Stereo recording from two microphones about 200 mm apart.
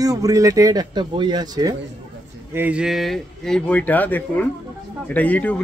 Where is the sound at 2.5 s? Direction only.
10° right (ahead or behind).